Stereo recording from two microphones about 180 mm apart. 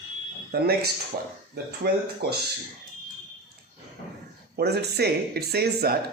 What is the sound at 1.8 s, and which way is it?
Speech, 65° right (ahead or behind).